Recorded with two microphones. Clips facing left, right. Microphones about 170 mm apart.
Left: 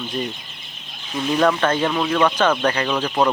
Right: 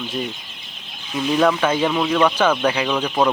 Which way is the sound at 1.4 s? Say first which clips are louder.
Even; 5° right (ahead or behind).